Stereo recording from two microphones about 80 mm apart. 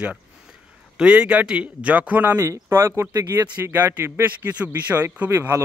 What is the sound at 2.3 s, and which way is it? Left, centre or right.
Speech, right.